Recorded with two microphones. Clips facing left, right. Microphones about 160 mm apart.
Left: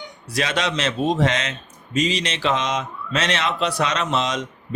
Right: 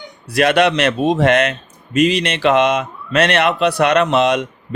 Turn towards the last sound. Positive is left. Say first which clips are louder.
# right 9 dB
turn(degrees=-60)  # may be behind; listen again after turning